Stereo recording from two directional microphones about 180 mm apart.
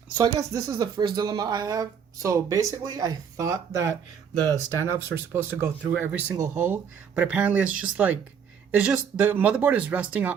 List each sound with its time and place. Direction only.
0.2 s speech: 20° right (ahead or behind)